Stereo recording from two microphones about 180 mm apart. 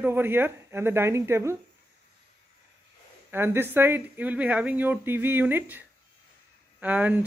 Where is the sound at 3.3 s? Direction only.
10° right (ahead or behind).